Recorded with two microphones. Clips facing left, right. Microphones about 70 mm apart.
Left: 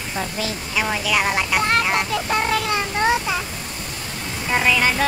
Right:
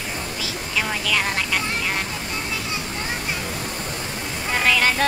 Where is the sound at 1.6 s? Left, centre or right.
Left.